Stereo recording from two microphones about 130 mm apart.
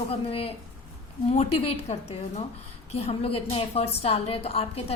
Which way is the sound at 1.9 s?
65° left (ahead or behind).